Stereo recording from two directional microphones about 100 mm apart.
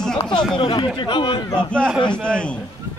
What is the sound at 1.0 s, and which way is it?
Speech, 55° left (ahead or behind).